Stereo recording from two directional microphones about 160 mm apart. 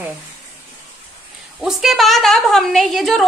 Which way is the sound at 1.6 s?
Centre (ahead or behind).